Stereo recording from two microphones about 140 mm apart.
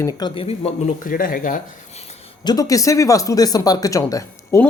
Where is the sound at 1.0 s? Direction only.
80° left.